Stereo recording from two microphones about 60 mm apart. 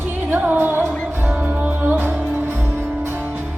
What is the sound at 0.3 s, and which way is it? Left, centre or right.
Music, right.